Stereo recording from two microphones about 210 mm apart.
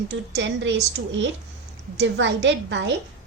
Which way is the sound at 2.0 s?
60° right (ahead or behind).